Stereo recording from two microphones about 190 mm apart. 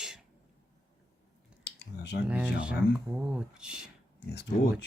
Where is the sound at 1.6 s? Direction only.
65° left (ahead or behind).